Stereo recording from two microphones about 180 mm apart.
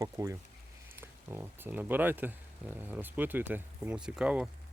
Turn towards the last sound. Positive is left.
turn(degrees=-5)  # may be behind; listen again after turning